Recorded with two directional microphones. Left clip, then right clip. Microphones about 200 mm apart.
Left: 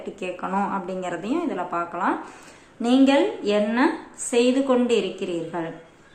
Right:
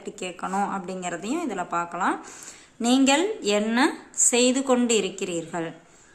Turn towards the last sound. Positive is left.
turn(degrees=-30)  # may be behind; listen again after turning